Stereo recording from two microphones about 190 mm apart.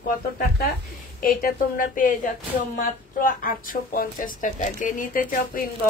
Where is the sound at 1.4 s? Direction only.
45° left (ahead or behind).